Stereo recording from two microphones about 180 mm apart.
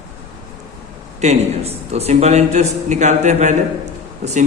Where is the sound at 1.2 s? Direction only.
35° right (ahead or behind).